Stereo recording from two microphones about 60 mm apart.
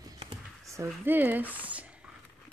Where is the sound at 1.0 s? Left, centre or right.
Right.